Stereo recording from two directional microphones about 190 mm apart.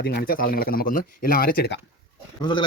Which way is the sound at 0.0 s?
55° left (ahead or behind).